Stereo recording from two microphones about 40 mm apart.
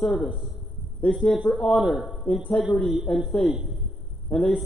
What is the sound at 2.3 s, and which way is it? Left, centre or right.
Speech, left.